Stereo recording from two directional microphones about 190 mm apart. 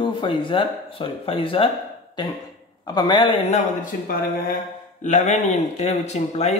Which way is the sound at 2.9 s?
20° left (ahead or behind).